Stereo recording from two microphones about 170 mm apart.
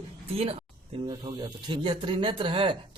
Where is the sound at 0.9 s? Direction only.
30° right (ahead or behind).